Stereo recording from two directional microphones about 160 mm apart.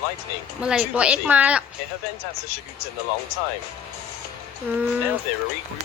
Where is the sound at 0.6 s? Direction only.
5° right (ahead or behind).